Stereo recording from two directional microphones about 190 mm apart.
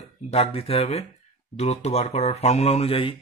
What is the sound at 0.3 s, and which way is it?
Speech, 30° left (ahead or behind).